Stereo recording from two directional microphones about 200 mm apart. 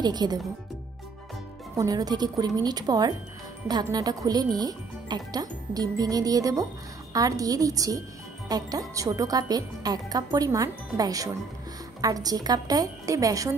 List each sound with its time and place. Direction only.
0.0 s speech: 20° right (ahead or behind)
1.8 s speech: 20° right (ahead or behind)